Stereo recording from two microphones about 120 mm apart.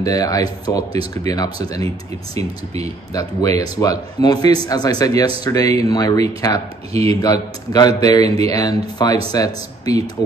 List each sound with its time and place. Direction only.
0.0 s speech: 30° left (ahead or behind)
2.3 s speech: 60° right (ahead or behind)
3.1 s speech: 30° left (ahead or behind)
6.9 s speech: 55° right (ahead or behind)
7.2 s speech: 35° left (ahead or behind)